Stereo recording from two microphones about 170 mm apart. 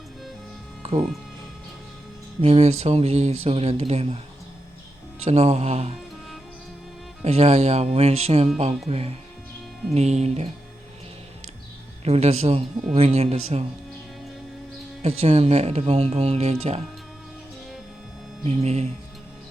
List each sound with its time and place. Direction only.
0.8 s music: 35° right (ahead or behind)
2.4 s speech: 35° right (ahead or behind)
5.2 s speech: 40° right (ahead or behind)
7.2 s speech: 35° right (ahead or behind)
12.0 s speech: 40° right (ahead or behind)
15.0 s speech: 40° right (ahead or behind)
18.4 s speech: 40° right (ahead or behind)